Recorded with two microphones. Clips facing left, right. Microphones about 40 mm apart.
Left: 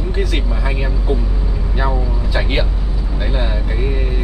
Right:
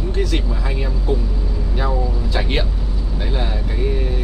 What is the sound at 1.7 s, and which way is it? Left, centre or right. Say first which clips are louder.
Speech: left 2 dB; centre.